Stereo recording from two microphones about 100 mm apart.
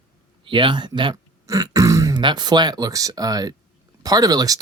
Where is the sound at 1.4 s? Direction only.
35° right (ahead or behind).